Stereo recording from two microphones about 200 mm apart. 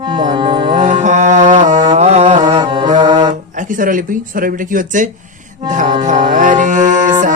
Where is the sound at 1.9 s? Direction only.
35° right (ahead or behind).